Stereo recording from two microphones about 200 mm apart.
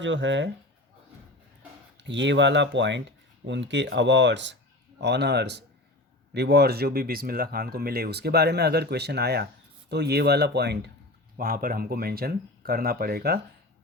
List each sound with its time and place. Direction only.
0.0 s speech: 65° right (ahead or behind)
2.0 s speech: 65° right (ahead or behind)